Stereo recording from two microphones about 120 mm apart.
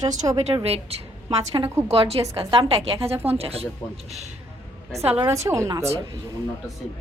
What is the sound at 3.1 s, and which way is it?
Speech, 15° right (ahead or behind).